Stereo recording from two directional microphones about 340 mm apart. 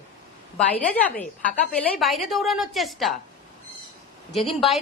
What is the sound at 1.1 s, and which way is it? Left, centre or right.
Speech, left.